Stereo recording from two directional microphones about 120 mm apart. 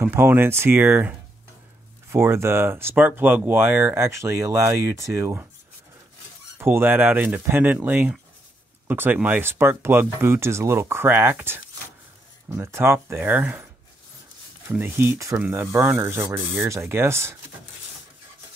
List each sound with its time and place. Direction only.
0.0 s speech: 20° right (ahead or behind)
6.6 s speech: 20° right (ahead or behind)
14.7 s speech: 20° right (ahead or behind)